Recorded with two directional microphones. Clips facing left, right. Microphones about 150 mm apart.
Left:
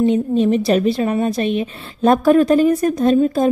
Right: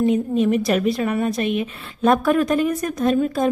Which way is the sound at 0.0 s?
30° left (ahead or behind).